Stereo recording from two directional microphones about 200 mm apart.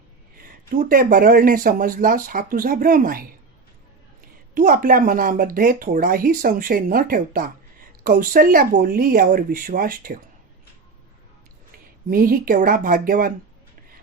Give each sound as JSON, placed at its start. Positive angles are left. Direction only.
{"t": 0.8, "sound": "speech", "side_deg": -45}
{"t": 4.5, "sound": "speech", "side_deg": -45}
{"t": 12.1, "sound": "speech", "side_deg": -45}